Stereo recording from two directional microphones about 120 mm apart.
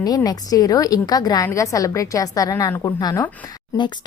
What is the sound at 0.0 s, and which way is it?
A woman's voice, 30° left (ahead or behind).